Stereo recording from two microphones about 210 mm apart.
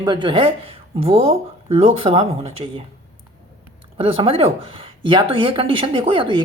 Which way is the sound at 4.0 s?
25° right (ahead or behind).